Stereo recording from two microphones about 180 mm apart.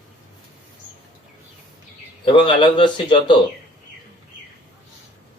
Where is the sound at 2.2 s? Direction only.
25° left (ahead or behind).